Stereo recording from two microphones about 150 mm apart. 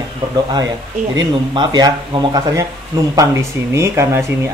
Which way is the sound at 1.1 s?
30° right (ahead or behind).